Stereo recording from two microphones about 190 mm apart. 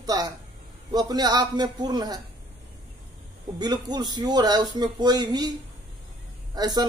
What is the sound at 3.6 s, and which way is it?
Speech, 20° right (ahead or behind).